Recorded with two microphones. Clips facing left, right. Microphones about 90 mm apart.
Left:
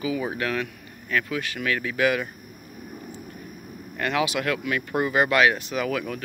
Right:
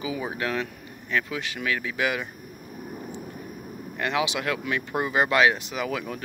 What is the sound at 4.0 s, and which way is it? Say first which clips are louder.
Speech: left 2 dB; 20° right (ahead or behind).